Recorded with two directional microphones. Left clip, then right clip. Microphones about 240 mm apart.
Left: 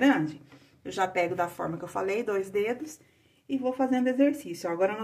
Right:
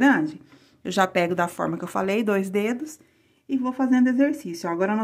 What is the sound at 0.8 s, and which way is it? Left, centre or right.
Speech, right.